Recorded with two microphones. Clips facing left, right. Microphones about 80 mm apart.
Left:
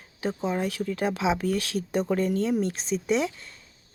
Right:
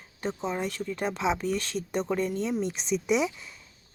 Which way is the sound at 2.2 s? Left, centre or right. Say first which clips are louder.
Left 4 dB; left.